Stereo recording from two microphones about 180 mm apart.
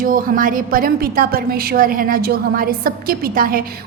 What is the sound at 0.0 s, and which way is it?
A woman's voice, 50° right (ahead or behind).